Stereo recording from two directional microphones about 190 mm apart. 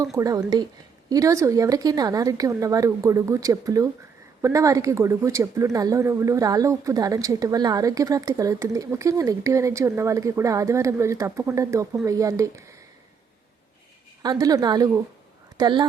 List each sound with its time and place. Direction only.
0.0 s speech: 15° right (ahead or behind)
14.2 s a woman's voice: 20° right (ahead or behind)